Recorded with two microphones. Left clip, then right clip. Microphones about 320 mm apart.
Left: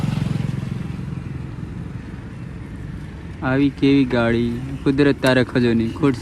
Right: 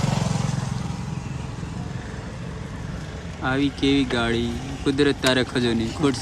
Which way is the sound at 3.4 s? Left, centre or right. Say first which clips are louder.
Left 4 dB; centre.